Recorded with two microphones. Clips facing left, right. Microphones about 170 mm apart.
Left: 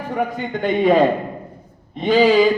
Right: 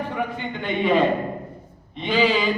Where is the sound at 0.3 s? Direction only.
40° left (ahead or behind).